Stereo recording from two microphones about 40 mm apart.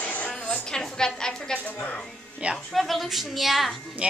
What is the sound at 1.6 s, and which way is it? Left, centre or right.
Speech, left.